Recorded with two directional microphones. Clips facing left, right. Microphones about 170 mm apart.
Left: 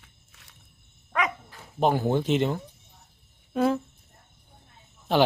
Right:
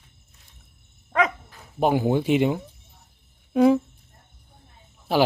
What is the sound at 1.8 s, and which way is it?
Speech, 10° right (ahead or behind).